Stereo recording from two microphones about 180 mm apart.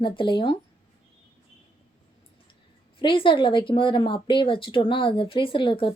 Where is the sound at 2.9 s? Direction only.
30° left (ahead or behind).